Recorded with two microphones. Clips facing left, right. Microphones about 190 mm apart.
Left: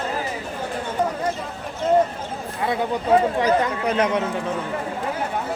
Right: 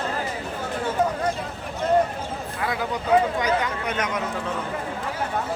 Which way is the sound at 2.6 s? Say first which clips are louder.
Left 4 dB; 30° left (ahead or behind).